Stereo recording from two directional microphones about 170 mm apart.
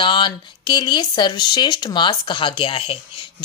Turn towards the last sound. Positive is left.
turn(degrees=30)  # may be behind; listen again after turning